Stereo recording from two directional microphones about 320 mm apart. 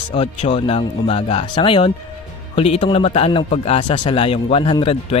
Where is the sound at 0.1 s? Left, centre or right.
Centre.